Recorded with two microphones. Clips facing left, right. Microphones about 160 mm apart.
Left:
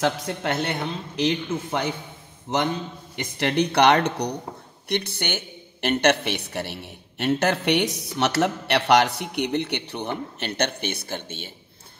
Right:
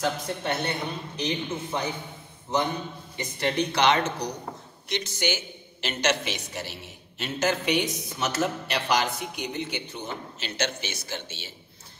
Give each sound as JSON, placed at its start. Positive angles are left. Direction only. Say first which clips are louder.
{"t": 0.0, "sound": "speech", "louder": "left 4 dB", "side_deg": 90}
{"t": 3.3, "sound": "a man's voice", "louder": "left 5 dB", "side_deg": 65}